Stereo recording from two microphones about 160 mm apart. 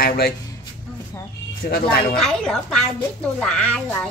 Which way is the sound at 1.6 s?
65° left (ahead or behind).